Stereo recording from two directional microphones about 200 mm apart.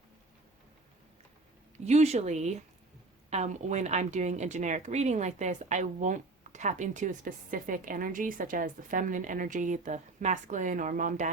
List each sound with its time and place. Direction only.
1.8 s a woman's voice: 35° right (ahead or behind)